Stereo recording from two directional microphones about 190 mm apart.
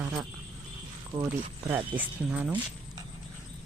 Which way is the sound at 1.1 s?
15° right (ahead or behind).